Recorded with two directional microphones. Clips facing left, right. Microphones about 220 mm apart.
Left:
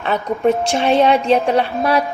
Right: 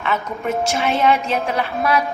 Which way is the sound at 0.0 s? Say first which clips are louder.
Left 7 dB; 35° left (ahead or behind).